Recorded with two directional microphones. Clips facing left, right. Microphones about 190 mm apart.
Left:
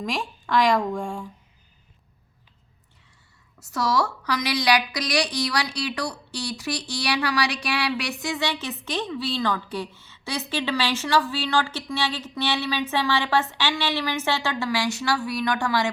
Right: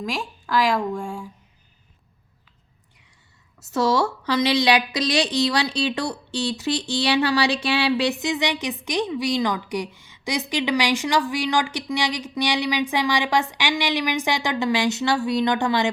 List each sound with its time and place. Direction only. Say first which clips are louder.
0.0 s speech: even; centre (ahead or behind)
3.6 s a woman's voice: right 4 dB; 25° right (ahead or behind)